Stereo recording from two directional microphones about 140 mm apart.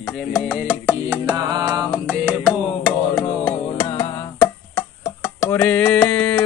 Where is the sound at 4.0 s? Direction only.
30° left (ahead or behind).